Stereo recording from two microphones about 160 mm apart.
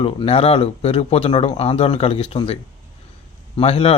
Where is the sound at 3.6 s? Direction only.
35° left (ahead or behind).